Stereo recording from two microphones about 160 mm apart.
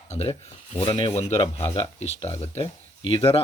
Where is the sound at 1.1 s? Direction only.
40° left (ahead or behind).